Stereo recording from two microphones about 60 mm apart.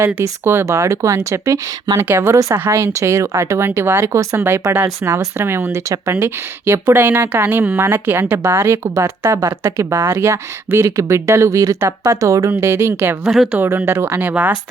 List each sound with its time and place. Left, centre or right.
0.0 s a woman's voice: right
2.0 s a woman's voice: right
2.6 s a woman's voice: right
3.0 s a woman's voice: right
4.1 s speech: right
4.4 s a woman's voice: right
12.5 s a woman's voice: right
14.2 s speech: right